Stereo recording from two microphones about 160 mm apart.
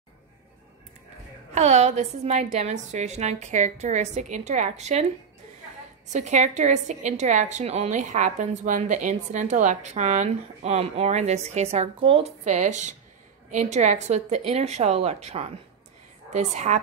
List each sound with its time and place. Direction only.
1.5 s a woman's voice: 45° right (ahead or behind)
6.1 s a woman's voice: 45° right (ahead or behind)